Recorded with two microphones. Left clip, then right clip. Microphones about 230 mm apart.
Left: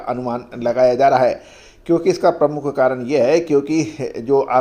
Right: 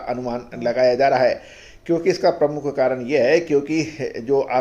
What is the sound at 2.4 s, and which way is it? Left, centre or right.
Speech, left.